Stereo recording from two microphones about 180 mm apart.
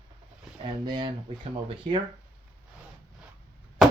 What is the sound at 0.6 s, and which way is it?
Speech, 25° right (ahead or behind).